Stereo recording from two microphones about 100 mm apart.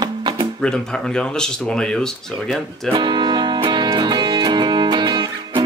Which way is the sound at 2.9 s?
50° right (ahead or behind).